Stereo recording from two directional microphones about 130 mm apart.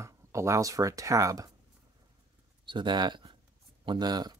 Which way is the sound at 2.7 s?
35° right (ahead or behind).